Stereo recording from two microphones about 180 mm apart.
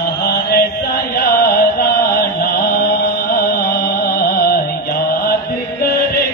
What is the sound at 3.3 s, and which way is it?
Music, 60° left (ahead or behind).